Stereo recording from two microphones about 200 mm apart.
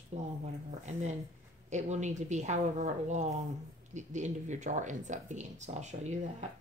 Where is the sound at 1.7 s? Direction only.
35° right (ahead or behind).